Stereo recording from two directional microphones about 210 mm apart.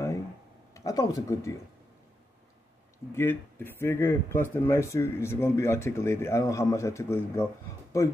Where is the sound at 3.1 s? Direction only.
10° left (ahead or behind).